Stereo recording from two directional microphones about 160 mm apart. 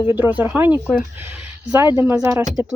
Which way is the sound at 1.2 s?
10° right (ahead or behind).